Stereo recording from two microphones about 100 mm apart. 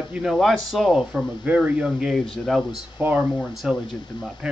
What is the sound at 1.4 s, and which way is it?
Speech, 15° right (ahead or behind).